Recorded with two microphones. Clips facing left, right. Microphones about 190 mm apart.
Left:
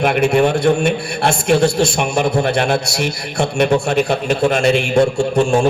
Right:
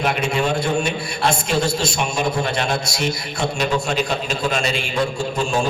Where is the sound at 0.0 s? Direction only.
60° left (ahead or behind).